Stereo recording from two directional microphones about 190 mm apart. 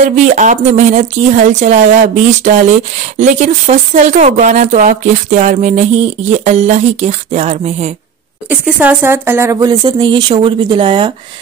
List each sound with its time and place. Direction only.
0.2 s speech: 40° right (ahead or behind)
8.5 s speech: 10° right (ahead or behind); by 11.1 s 25° right (ahead or behind)